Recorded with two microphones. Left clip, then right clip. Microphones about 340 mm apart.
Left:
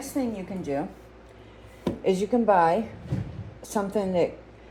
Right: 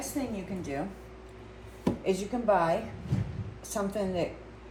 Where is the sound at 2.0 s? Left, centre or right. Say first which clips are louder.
Left 7 dB; left.